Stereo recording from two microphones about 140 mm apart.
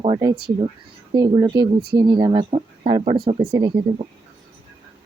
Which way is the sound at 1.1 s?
30° right (ahead or behind).